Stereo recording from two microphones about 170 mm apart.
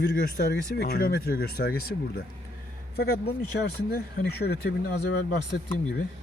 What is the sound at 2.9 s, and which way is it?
Speech, 65° left (ahead or behind).